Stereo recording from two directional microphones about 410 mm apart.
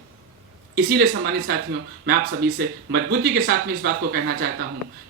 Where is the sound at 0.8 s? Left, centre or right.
Right.